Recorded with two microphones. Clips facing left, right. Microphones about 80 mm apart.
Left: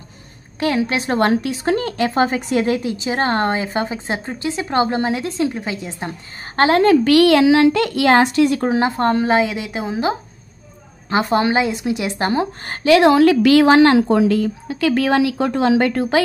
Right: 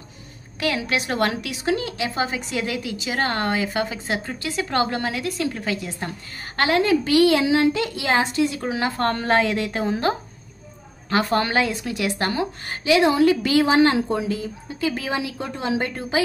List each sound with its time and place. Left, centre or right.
0.6 s a woman's voice: left
6.8 s a child's voice: left
8.5 s speech: left
8.8 s a woman's voice: left
12.6 s a woman's voice: left